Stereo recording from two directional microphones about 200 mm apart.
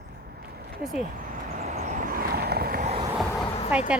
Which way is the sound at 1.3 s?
40° right (ahead or behind).